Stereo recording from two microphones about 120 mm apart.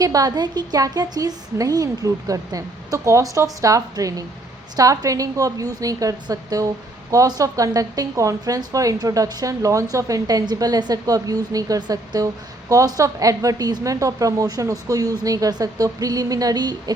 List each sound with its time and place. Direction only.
0.0 s a woman's voice: 30° right (ahead or behind)